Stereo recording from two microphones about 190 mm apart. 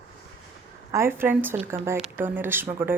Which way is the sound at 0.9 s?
15° right (ahead or behind).